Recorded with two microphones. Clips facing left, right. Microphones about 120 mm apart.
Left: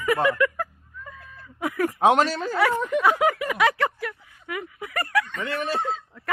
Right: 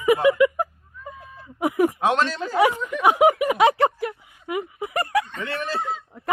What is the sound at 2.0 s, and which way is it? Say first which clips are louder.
Speech: left 3 dB; 15° left (ahead or behind).